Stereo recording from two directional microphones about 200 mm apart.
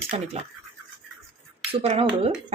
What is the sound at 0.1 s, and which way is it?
Speech, 30° right (ahead or behind).